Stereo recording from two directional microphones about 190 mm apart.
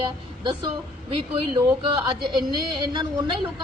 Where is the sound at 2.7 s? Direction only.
25° right (ahead or behind).